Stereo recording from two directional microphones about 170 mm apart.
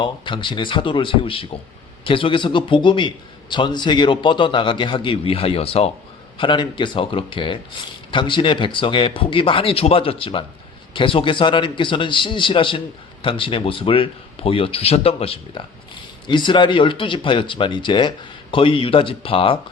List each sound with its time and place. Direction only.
0.0 s a man's voice: 30° left (ahead or behind)